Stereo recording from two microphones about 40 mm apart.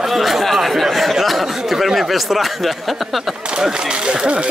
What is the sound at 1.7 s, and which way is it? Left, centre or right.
Speech, centre.